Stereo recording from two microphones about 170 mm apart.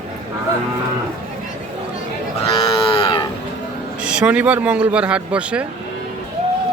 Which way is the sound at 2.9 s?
30° left (ahead or behind).